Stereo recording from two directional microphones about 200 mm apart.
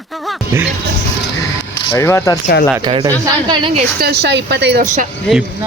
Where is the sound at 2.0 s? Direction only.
15° left (ahead or behind).